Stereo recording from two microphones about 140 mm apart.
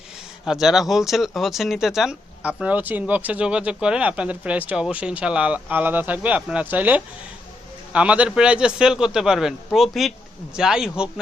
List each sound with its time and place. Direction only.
0.4 s a man's voice: 5° right (ahead or behind)